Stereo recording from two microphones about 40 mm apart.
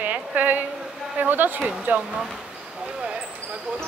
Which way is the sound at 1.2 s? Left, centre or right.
Right.